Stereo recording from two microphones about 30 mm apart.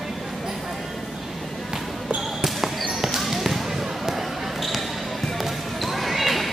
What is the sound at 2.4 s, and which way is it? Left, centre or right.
Basketball bounce, centre.